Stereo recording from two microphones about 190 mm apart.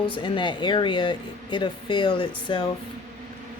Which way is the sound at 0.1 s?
25° left (ahead or behind).